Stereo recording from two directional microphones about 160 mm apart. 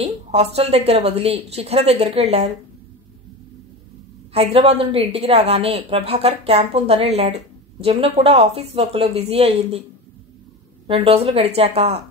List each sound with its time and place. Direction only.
0.0 s a woman's voice: 40° right (ahead or behind)
4.3 s a woman's voice: 40° right (ahead or behind)
10.9 s a woman's voice: 40° right (ahead or behind)